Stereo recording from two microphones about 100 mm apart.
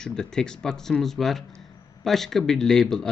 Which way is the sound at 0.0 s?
5° left (ahead or behind).